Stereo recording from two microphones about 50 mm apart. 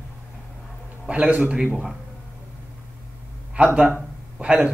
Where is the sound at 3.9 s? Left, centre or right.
Right.